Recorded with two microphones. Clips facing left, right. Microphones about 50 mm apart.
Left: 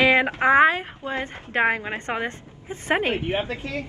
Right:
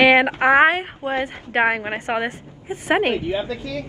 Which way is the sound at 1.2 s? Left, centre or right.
Centre.